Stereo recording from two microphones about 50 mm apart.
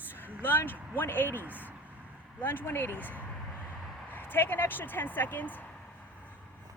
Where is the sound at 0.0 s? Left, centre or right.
Left.